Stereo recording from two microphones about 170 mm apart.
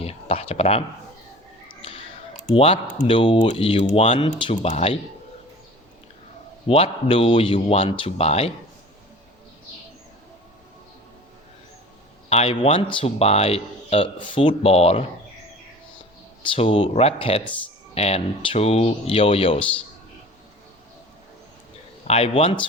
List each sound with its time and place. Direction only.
0.0 s speech: 35° left (ahead or behind)
1.8 s clicking: 35° left (ahead or behind)
3.1 s speech: 30° left (ahead or behind)
6.7 s speech: 35° left (ahead or behind)
12.3 s speech: 35° left (ahead or behind)
16.6 s speech: 35° left (ahead or behind)
22.0 s speech: 35° left (ahead or behind)